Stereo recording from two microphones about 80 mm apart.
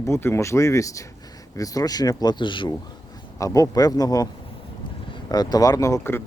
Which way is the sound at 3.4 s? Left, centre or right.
Left.